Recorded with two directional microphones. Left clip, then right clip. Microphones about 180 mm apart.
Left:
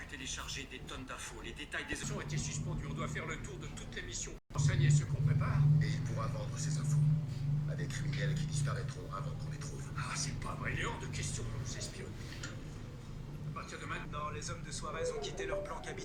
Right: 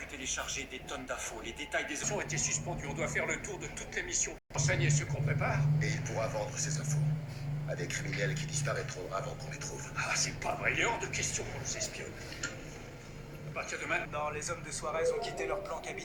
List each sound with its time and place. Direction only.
0.3 s speech: 20° left (ahead or behind)
2.0 s speech: 15° right (ahead or behind)
13.6 s speech: 15° right (ahead or behind)
15.4 s speech: centre (ahead or behind)